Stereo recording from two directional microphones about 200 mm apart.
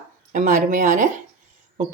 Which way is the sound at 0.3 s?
40° right (ahead or behind).